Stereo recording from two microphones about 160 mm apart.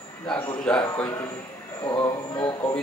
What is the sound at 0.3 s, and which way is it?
Speech, 5° left (ahead or behind).